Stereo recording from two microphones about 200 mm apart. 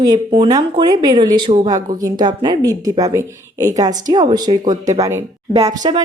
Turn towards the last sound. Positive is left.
turn(degrees=-20)  # may be behind; listen again after turning